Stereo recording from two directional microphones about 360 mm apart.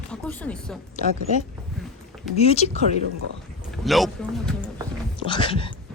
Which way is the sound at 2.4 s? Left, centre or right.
Centre.